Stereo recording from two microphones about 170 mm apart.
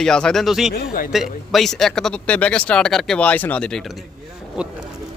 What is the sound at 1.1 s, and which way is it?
Speech, centre (ahead or behind).